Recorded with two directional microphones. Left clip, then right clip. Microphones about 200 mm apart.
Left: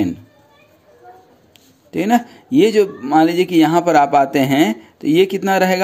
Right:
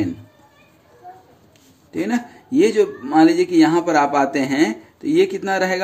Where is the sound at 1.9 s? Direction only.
40° left (ahead or behind).